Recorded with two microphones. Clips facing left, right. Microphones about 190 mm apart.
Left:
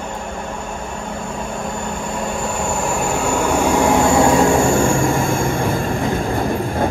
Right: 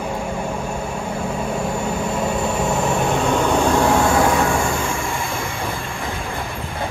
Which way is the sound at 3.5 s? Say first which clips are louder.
Left 3 dB; 15° left (ahead or behind).